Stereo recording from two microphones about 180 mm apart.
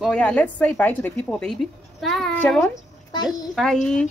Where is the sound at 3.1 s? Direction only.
20° left (ahead or behind).